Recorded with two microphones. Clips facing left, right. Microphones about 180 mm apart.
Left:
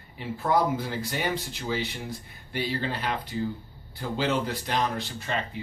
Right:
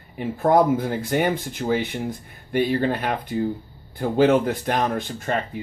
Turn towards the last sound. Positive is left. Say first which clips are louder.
# right 6 dB
turn(degrees=-50)  # may be behind; listen again after turning